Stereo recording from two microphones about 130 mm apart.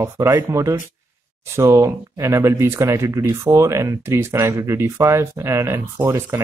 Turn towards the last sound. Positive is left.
turn(degrees=-20)  # may be behind; listen again after turning